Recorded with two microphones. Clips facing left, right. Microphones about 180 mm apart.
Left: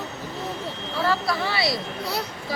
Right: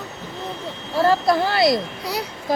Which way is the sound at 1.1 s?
50° right (ahead or behind).